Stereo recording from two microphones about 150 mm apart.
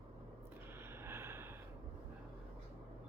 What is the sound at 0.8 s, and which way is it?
Gasp, 15° right (ahead or behind).